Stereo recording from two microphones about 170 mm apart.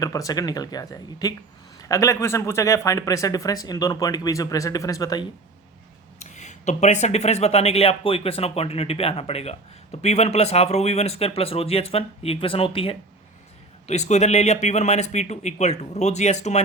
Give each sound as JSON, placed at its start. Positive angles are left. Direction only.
{"t": 0.0, "sound": "speech", "side_deg": 20}
{"t": 6.1, "sound": "speech", "side_deg": 45}